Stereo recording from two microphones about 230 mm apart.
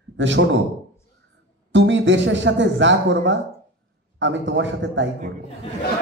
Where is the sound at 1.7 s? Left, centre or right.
Right.